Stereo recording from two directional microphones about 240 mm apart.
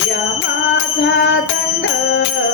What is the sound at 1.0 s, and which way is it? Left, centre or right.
Music, left.